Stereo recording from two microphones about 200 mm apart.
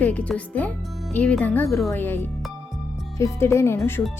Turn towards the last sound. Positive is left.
turn(degrees=10)  # may be behind; listen again after turning